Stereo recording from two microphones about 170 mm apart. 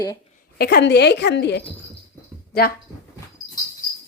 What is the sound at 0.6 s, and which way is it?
A woman's voice, 70° left (ahead or behind).